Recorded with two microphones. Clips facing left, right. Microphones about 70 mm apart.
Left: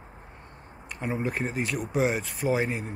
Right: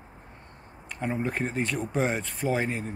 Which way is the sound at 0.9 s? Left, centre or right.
Centre.